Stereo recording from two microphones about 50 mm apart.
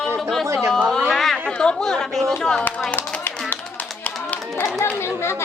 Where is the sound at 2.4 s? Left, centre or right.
Centre.